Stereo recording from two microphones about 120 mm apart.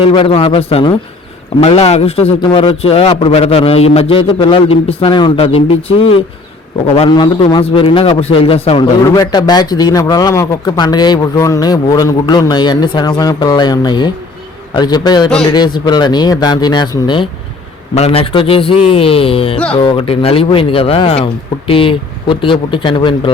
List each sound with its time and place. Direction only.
0.0 s a man's voice: 45° left (ahead or behind)
2.4 s a man's voice: 40° left (ahead or behind)
5.5 s a man's voice: 50° left (ahead or behind)
6.8 s a man's voice: 60° left (ahead or behind)
7.1 s speech: 40° left (ahead or behind)
7.6 s a man's voice: 50° left (ahead or behind)
8.8 s speech: 35° left (ahead or behind)
17.9 s a man's voice: 60° left (ahead or behind)
21.7 s a man's voice: 45° left (ahead or behind)